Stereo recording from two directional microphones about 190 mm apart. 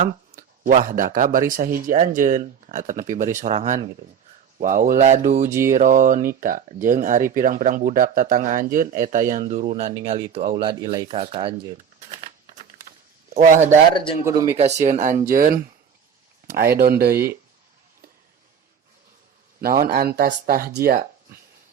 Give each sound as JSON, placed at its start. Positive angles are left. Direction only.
{"t": 0.0, "sound": "speech", "side_deg": -45}
{"t": 5.5, "sound": "speech", "side_deg": -15}
{"t": 5.7, "sound": "speech", "side_deg": -45}
{"t": 9.9, "sound": "speech", "side_deg": -25}
{"t": 11.8, "sound": "shuffling cards", "side_deg": -40}
{"t": 13.3, "sound": "speech", "side_deg": -40}
{"t": 14.3, "sound": "speech", "side_deg": -15}
{"t": 14.6, "sound": "speech", "side_deg": -35}
{"t": 19.6, "sound": "speech", "side_deg": -50}